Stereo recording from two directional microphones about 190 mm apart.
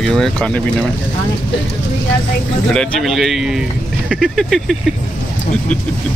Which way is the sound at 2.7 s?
Centre (ahead or behind).